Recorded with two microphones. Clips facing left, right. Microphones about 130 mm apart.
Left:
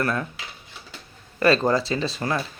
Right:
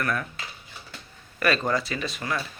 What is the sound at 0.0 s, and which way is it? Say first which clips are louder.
Speech: left 3 dB; 25° left (ahead or behind).